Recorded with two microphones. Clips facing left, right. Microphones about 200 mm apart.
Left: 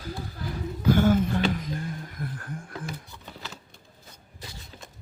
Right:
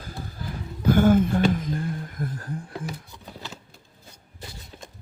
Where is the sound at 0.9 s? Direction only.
50° right (ahead or behind).